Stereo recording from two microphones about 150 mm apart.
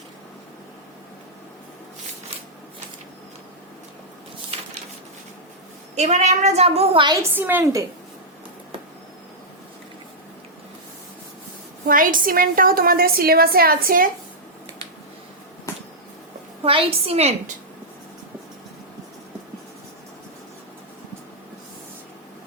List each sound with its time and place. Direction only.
6.0 s a woman's voice: 50° right (ahead or behind)
7.1 s a woman's voice: 15° right (ahead or behind)
11.9 s a woman's voice: 65° right (ahead or behind)
16.6 s a woman's voice: 40° right (ahead or behind)